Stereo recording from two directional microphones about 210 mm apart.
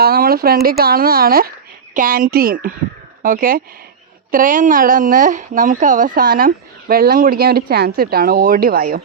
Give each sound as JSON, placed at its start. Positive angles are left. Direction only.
{"t": 0.0, "sound": "speech", "side_deg": -45}